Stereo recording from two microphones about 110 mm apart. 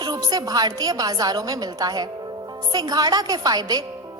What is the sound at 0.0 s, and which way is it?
A woman's voice, 40° right (ahead or behind).